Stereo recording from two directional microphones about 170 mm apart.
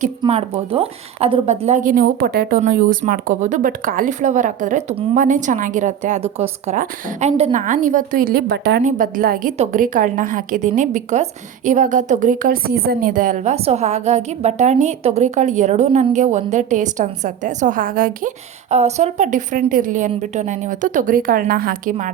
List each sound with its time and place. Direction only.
0.3 s a woman's voice: 35° right (ahead or behind); by 8.8 s 80° right
8.8 s a woman's voice: 50° right (ahead or behind)